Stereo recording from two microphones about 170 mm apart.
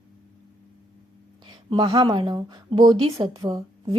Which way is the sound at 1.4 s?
25° right (ahead or behind).